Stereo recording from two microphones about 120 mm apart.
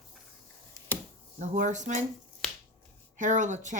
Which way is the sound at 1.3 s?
90° right.